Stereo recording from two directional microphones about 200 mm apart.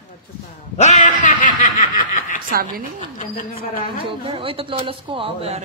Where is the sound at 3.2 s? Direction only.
45° left (ahead or behind).